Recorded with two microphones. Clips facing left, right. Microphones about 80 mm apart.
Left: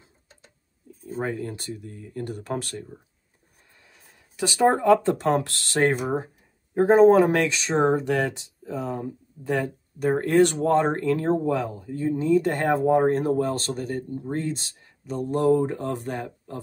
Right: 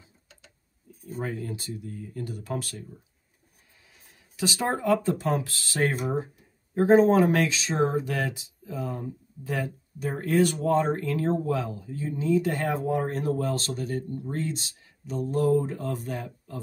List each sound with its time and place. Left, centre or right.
0.0 s tick-tock: left
1.0 s speech: left
3.8 s a sound: left
5.0 s speech: left